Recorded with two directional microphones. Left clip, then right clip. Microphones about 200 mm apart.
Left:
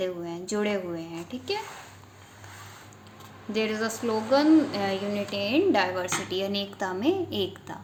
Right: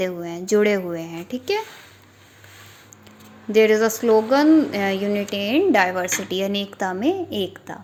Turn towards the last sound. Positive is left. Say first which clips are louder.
# right 4 dB
turn(degrees=-35)  # may be behind; listen again after turning